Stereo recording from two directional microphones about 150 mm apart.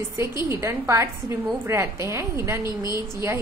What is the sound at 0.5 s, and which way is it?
A woman's voice, 20° right (ahead or behind).